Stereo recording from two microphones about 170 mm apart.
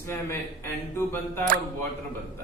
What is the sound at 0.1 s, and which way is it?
Speech, 15° left (ahead or behind).